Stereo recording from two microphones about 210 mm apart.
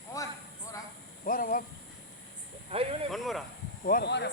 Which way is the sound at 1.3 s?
40° left (ahead or behind).